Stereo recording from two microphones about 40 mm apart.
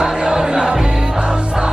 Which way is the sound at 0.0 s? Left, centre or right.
Centre.